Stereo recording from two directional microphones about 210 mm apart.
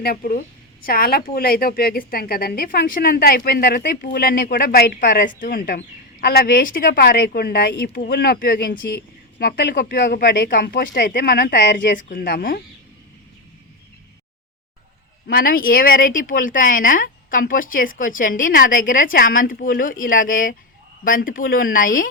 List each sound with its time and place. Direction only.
0.0 s a woman's voice: 45° left (ahead or behind)
15.3 s speech: 45° left (ahead or behind)